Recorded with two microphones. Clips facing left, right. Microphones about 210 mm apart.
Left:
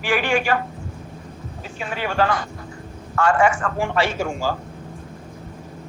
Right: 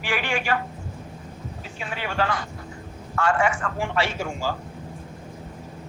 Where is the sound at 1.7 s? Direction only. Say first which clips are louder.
Left 5 dB; 45° left (ahead or behind).